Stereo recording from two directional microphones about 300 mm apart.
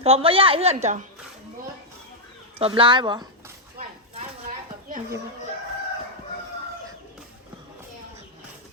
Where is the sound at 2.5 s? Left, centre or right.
Centre.